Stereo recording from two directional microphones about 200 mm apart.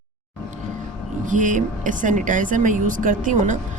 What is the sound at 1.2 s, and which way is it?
Speech, 40° right (ahead or behind).